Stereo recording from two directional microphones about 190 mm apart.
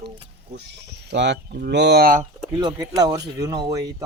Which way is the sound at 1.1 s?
65° right (ahead or behind).